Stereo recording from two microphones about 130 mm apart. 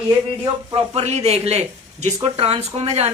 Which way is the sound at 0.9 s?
55° right (ahead or behind).